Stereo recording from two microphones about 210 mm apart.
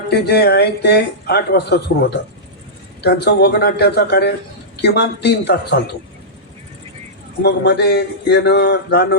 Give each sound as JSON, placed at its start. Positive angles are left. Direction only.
{"t": 0.1, "sound": "speech", "side_deg": 50}
{"t": 7.4, "sound": "speech", "side_deg": 50}